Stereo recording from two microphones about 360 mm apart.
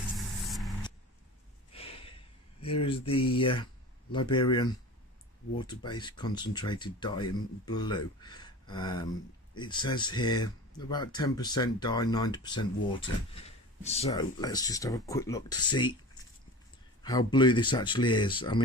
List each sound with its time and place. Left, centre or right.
0.4 s vehicle: centre
1.7 s a sound: centre
2.6 s speech: centre
17.0 s speech: centre